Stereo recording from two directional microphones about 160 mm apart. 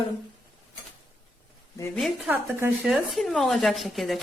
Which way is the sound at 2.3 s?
10° right (ahead or behind).